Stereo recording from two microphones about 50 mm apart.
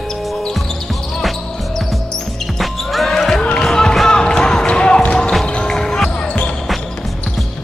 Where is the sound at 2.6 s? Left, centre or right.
Centre.